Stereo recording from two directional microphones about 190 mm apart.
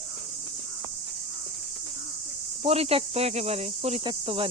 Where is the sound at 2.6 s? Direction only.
30° right (ahead or behind).